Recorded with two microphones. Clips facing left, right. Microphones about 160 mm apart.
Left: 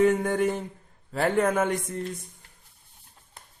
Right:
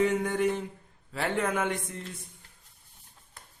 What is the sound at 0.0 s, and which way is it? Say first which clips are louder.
Speech: left 4 dB; 50° left (ahead or behind).